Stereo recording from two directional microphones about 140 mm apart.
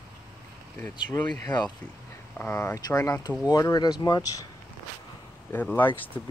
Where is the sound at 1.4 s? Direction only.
30° left (ahead or behind).